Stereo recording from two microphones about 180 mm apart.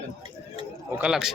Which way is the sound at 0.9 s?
5° right (ahead or behind).